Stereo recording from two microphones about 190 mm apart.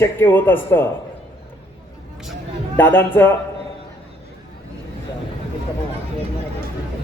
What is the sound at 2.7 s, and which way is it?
Speech, 10° left (ahead or behind).